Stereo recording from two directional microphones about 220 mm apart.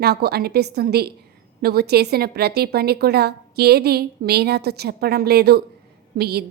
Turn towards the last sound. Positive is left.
turn(degrees=-45)  # may be behind; listen again after turning